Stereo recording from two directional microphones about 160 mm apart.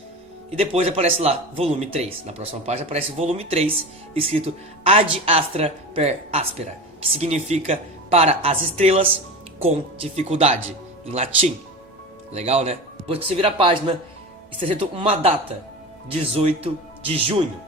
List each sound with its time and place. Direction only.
0.5 s speech: 35° right (ahead or behind)